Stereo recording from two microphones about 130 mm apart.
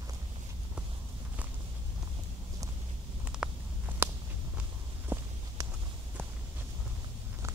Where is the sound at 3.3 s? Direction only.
5° right (ahead or behind).